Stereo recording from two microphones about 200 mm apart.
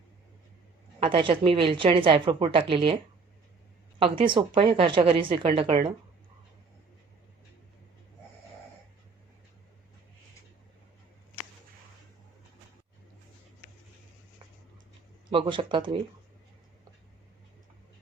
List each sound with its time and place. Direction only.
0.9 s a woman's voice: 25° right (ahead or behind)
4.2 s a woman's voice: 25° right (ahead or behind)
15.3 s a woman's voice: 25° right (ahead or behind)